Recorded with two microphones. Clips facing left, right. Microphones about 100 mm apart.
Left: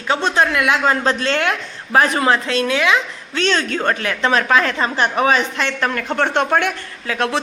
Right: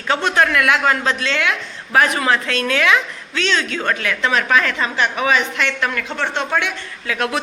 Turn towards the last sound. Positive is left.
turn(degrees=30)  # may be behind; listen again after turning